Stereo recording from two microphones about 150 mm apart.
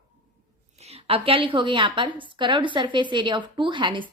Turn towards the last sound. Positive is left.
turn(degrees=-35)  # may be behind; listen again after turning